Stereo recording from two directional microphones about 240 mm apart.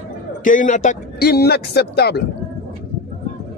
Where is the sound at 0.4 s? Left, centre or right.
Left.